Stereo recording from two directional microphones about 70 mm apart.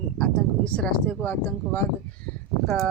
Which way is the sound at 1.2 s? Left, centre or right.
Left.